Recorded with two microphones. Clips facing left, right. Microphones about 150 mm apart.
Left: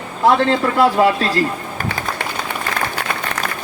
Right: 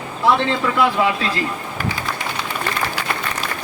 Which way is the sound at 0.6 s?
40° left (ahead or behind).